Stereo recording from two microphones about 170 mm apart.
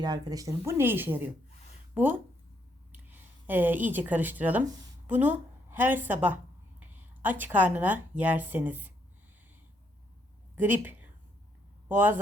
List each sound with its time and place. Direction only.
0.0 s speech: 25° right (ahead or behind)
7.2 s speech: 10° right (ahead or behind)
10.5 s a woman's voice: 10° right (ahead or behind)